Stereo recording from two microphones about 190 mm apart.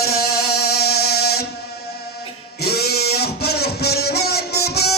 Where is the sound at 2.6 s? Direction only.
55° left (ahead or behind).